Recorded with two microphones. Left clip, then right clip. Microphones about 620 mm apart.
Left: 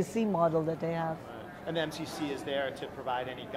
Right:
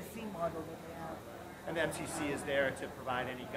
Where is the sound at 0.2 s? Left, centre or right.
Left.